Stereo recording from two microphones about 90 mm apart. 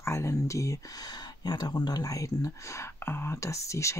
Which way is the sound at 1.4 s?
50° left (ahead or behind).